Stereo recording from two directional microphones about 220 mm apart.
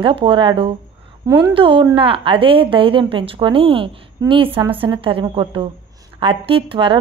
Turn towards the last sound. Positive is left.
turn(degrees=-25)  # may be behind; listen again after turning